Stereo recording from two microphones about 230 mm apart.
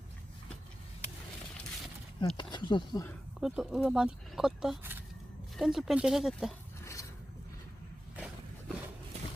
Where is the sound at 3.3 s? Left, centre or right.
Centre.